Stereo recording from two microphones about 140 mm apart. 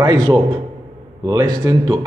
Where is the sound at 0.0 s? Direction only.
30° right (ahead or behind).